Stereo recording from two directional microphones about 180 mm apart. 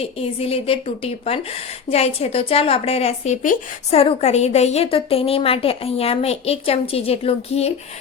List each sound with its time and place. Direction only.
0.0 s a woman's voice: 35° left (ahead or behind)